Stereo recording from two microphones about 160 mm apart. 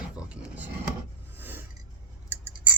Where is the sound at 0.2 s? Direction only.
10° right (ahead or behind).